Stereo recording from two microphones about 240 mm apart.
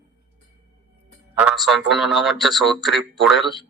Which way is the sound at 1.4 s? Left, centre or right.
Centre.